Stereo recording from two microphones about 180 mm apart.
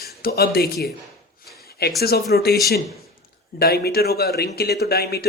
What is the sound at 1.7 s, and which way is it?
Speech, 60° left (ahead or behind).